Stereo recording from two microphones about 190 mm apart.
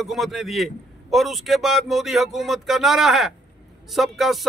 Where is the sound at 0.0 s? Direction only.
Centre (ahead or behind).